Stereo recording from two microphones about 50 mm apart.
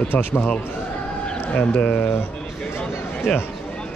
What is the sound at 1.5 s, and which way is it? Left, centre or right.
Speech, left.